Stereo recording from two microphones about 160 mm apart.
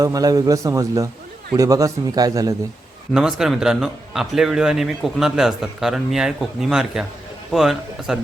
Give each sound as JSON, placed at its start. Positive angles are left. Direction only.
{"t": 0.0, "sound": "a man's voice", "side_deg": -20}
{"t": 3.1, "sound": "speech", "side_deg": -5}